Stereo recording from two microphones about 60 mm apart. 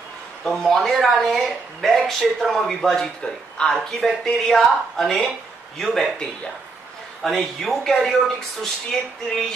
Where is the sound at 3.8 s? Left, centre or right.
Centre.